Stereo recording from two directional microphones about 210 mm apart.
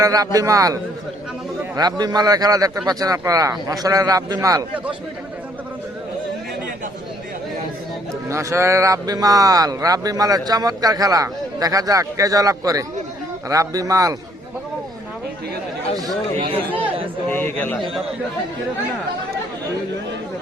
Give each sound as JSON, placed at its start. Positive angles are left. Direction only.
{"t": 0.0, "sound": "speech", "side_deg": -15}
{"t": 8.3, "sound": "speech", "side_deg": -15}
{"t": 16.0, "sound": "speech", "side_deg": -20}
{"t": 17.2, "sound": "a man's voice", "side_deg": 10}